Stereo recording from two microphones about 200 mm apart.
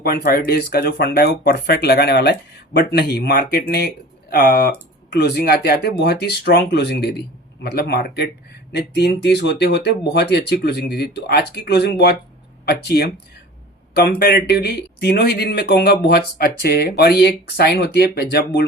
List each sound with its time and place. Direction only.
0.0 s speech: 50° left (ahead or behind)